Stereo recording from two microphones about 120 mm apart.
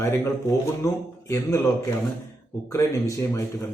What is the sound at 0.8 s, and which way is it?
Speech, 30° left (ahead or behind).